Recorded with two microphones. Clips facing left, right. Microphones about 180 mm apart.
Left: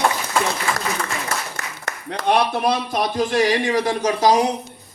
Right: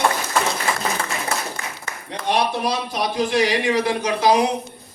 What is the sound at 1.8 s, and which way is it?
Speech, 70° left (ahead or behind).